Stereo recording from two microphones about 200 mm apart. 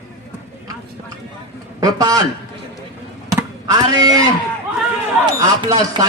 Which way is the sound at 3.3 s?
15° right (ahead or behind).